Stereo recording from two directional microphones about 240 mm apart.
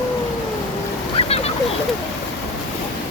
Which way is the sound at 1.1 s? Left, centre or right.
Left.